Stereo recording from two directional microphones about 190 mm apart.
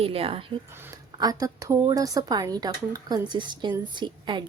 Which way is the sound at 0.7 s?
15° right (ahead or behind).